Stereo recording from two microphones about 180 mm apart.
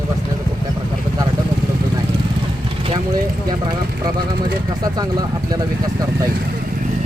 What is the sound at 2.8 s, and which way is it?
Speech, 25° right (ahead or behind).